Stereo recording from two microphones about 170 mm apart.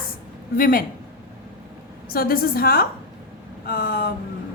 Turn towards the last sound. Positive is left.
turn(degrees=60)  # may be behind; listen again after turning